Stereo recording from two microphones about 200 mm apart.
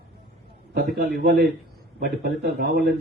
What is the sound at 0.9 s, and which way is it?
Speech, 50° right (ahead or behind).